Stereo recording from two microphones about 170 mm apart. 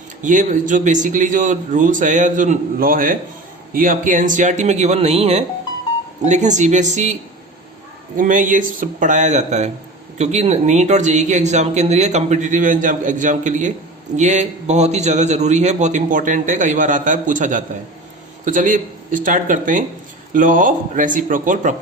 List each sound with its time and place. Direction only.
0.2 s speech: 50° right (ahead or behind)